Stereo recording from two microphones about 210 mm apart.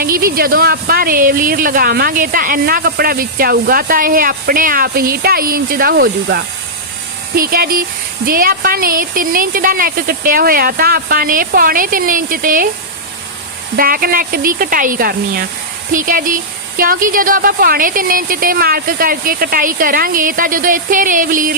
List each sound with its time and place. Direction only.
0.0 s speech: 45° right (ahead or behind)
13.7 s a woman's voice: 45° right (ahead or behind)